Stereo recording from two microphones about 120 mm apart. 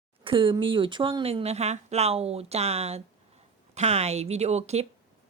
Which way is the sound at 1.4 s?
65° right (ahead or behind).